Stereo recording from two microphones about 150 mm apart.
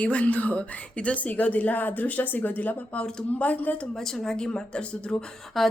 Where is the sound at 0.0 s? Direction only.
10° left (ahead or behind).